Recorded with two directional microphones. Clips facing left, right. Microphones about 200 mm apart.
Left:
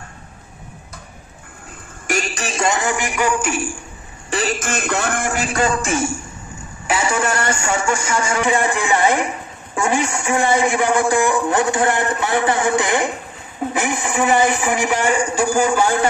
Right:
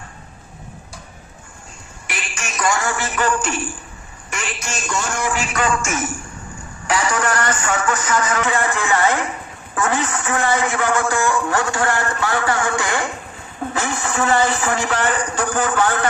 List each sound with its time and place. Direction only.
2.0 s a man's voice: 40° left (ahead or behind); by 3.7 s 10° left (ahead or behind)
4.3 s a man's voice: 35° left (ahead or behind)
4.6 s speech: 55° left (ahead or behind)
5.5 s a man's voice: 35° left (ahead or behind)
8.4 s a man's voice: 15° left (ahead or behind)